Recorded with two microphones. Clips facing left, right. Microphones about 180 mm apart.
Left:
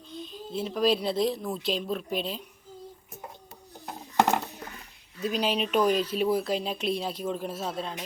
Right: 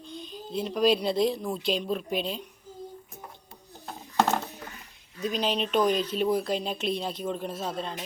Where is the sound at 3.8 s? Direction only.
15° left (ahead or behind).